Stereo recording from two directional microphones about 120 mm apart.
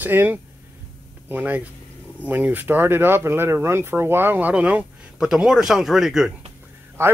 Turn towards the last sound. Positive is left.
turn(degrees=-20)  # may be behind; listen again after turning